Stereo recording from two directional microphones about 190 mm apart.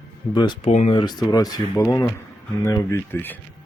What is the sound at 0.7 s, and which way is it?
Speech, 35° left (ahead or behind).